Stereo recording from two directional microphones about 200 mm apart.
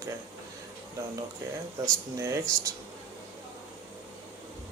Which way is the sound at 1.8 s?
15° right (ahead or behind).